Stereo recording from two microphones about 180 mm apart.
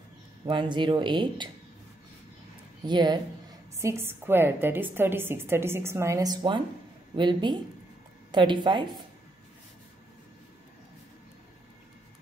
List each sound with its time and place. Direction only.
0.5 s speech: 25° right (ahead or behind)
2.9 s a woman's voice: 25° right (ahead or behind)